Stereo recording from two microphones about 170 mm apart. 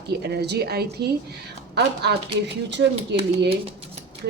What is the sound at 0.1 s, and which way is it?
A woman's voice, 70° right (ahead or behind).